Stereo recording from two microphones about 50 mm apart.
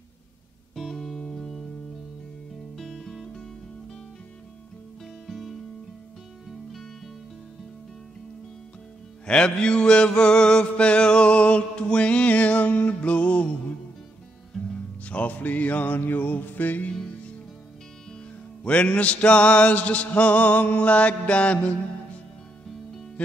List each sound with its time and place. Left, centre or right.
0.7 s music: centre
2.7 s music: centre
5.2 s music: centre
9.2 s music: centre
15.0 s music: left
18.6 s music: left